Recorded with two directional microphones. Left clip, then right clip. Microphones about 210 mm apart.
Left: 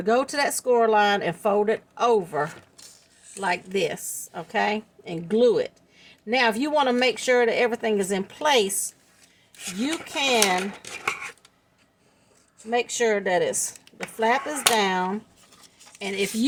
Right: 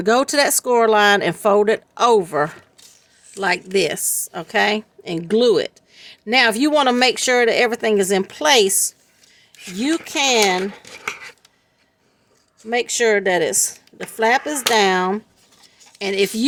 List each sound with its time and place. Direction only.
0.0 s a woman's voice: 50° right (ahead or behind)
12.7 s a woman's voice: 50° right (ahead or behind)